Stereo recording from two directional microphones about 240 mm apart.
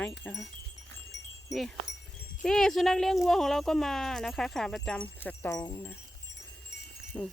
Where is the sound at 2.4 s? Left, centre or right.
Centre.